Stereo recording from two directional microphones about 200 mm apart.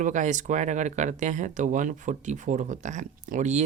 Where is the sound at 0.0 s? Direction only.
40° right (ahead or behind).